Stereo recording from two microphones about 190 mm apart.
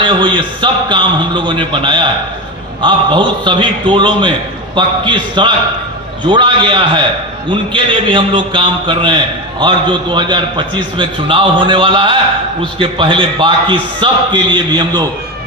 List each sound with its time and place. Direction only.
0.0 s a man's voice: 25° right (ahead or behind)